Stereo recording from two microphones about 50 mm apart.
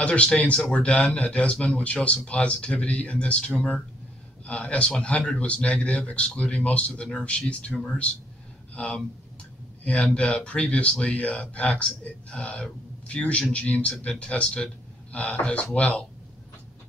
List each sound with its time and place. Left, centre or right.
0.0 s a man's voice: left